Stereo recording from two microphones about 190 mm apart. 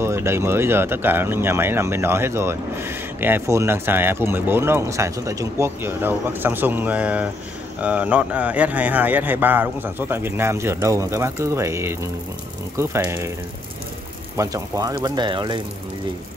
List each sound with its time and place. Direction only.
0.0 s speech: 15° right (ahead or behind)
14.3 s speech: 15° right (ahead or behind)